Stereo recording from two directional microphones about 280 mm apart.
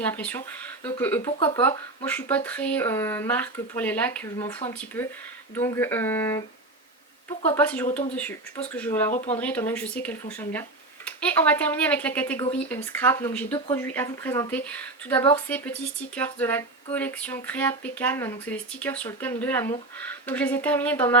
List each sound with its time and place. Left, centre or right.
0.0 s speech: centre
9.1 s speech: left
9.4 s speech: centre